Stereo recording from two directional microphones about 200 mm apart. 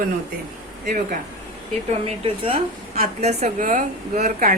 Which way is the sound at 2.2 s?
25° right (ahead or behind).